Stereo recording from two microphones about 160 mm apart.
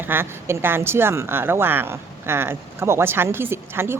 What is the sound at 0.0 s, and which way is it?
A woman's voice, 15° right (ahead or behind).